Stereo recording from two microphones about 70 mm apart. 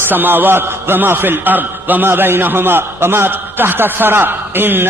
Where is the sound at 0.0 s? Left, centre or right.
Right.